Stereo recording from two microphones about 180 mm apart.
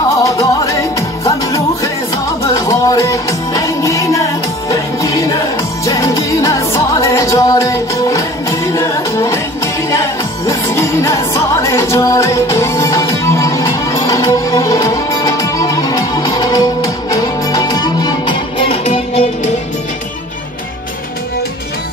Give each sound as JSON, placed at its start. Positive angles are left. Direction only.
{"t": 0.2, "sound": "music", "side_deg": 20}
{"t": 2.4, "sound": "music", "side_deg": 20}